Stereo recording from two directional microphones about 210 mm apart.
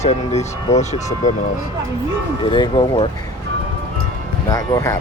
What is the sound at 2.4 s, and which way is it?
Speech, 20° left (ahead or behind).